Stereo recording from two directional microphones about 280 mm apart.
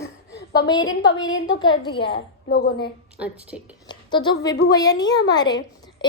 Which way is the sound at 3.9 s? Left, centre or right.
Centre.